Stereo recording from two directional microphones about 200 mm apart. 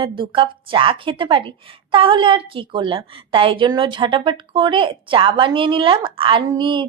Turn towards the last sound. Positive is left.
turn(degrees=-25)  # may be behind; listen again after turning